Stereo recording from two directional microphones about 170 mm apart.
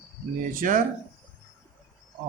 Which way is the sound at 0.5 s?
50° right (ahead or behind).